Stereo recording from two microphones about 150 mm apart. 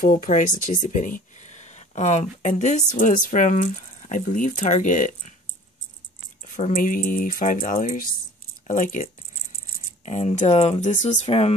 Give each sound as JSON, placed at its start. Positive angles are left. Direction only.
{"t": 0.0, "sound": "speech", "side_deg": 65}
{"t": 6.4, "sound": "speech", "side_deg": 60}
{"t": 10.0, "sound": "speech", "side_deg": 50}